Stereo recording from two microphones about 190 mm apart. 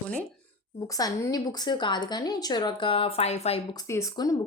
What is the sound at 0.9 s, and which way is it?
Speech, 20° left (ahead or behind).